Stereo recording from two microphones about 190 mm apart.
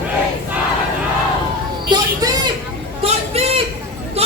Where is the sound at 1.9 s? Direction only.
20° right (ahead or behind).